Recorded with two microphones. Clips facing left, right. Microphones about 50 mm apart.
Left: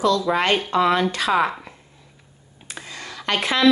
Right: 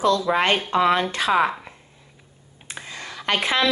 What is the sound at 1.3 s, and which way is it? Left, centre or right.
Speech, centre.